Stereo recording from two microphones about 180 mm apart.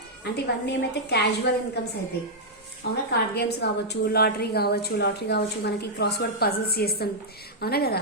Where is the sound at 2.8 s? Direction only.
65° left (ahead or behind).